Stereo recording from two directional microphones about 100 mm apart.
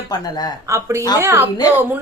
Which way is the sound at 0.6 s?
30° right (ahead or behind).